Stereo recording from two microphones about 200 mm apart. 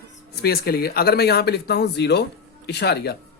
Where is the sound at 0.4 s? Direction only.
50° left (ahead or behind).